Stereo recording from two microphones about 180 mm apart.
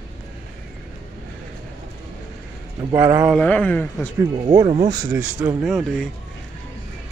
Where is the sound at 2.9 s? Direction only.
15° right (ahead or behind).